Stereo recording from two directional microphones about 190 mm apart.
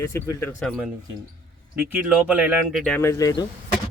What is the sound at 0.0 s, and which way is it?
Speech, 10° left (ahead or behind).